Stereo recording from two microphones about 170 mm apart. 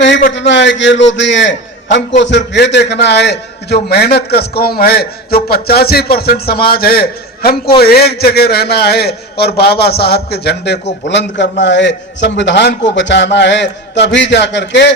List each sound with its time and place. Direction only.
0.3 s a man's voice: 90° left
11.1 s a man's voice: 90° left